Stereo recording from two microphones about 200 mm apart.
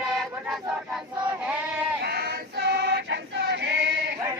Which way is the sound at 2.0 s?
50° right (ahead or behind).